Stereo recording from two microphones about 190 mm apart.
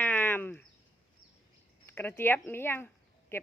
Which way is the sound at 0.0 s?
10° left (ahead or behind).